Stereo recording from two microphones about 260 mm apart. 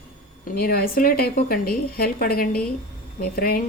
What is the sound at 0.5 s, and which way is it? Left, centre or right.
Speech, left.